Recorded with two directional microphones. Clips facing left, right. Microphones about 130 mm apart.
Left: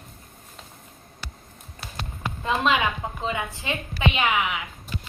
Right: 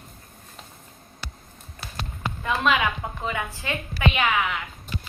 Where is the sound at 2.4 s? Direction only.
20° left (ahead or behind).